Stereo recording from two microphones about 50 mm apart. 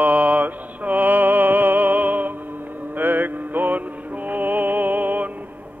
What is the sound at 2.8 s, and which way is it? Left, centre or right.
Music, right.